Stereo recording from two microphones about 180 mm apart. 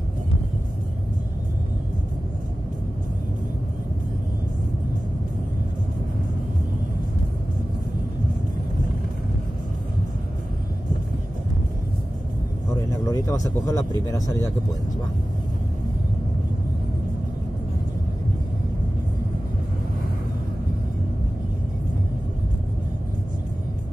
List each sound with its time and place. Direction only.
13.1 s speech: 20° left (ahead or behind)